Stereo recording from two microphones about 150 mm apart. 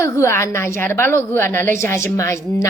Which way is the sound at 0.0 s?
20° left (ahead or behind).